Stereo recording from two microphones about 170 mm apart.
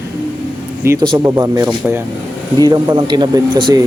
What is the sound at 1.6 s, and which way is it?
Speech, 5° right (ahead or behind).